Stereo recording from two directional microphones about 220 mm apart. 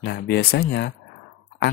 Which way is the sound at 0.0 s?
45° left (ahead or behind).